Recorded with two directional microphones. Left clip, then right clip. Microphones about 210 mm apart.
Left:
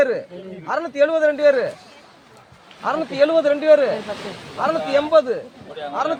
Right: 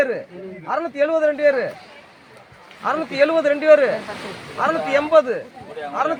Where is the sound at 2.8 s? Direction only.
15° right (ahead or behind).